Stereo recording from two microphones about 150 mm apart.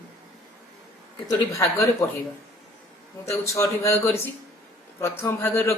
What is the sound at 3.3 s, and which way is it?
Speech, 20° left (ahead or behind).